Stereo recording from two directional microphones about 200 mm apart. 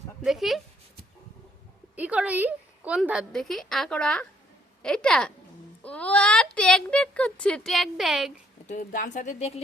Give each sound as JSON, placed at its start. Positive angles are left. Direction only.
{"t": 0.3, "sound": "speech", "side_deg": 0}
{"t": 2.0, "sound": "speech", "side_deg": -5}
{"t": 8.6, "sound": "speech", "side_deg": 40}